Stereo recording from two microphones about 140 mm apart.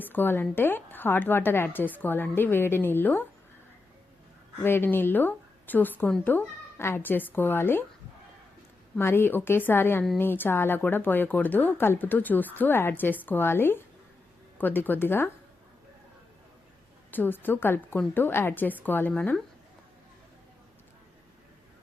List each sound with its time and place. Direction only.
0.0 s a woman's voice: 15° left (ahead or behind)
4.6 s a woman's voice: 15° left (ahead or behind)
9.0 s a woman's voice: 15° left (ahead or behind)
17.1 s a woman's voice: 15° left (ahead or behind)